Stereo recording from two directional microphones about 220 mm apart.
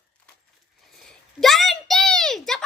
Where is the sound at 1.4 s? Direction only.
Centre (ahead or behind).